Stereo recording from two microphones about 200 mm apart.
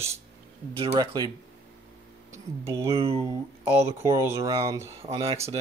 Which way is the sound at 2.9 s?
30° right (ahead or behind).